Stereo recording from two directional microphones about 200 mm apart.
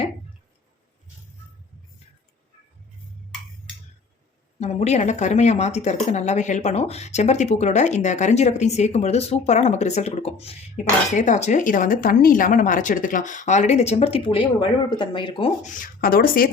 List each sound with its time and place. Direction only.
4.6 s speech: 35° left (ahead or behind)
15.8 s speech: 45° left (ahead or behind)